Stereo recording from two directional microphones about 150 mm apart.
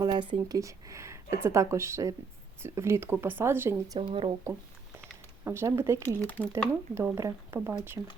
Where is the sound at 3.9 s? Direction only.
35° right (ahead or behind).